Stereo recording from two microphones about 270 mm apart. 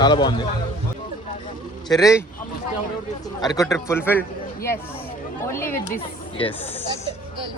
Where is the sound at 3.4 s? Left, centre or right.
Centre.